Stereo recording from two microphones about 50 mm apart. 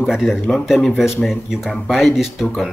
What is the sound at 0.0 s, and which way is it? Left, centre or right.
Speech, centre.